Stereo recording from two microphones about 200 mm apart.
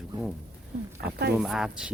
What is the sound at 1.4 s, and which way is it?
Speech, 5° right (ahead or behind).